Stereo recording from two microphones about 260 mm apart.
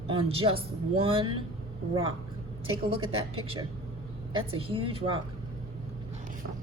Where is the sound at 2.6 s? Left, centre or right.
Right.